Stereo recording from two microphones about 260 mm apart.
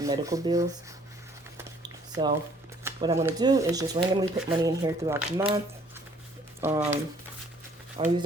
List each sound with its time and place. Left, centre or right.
0.0 s speech: centre
1.5 s a sound: centre
2.8 s speech: centre
6.6 s speech: centre
7.9 s speech: right